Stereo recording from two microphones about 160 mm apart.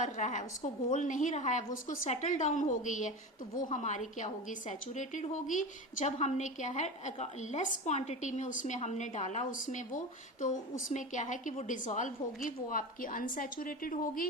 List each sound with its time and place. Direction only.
0.0 s a woman's voice: 50° left (ahead or behind)